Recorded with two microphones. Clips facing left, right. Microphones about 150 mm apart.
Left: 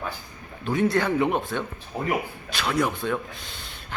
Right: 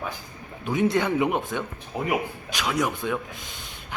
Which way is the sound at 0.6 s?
15° right (ahead or behind).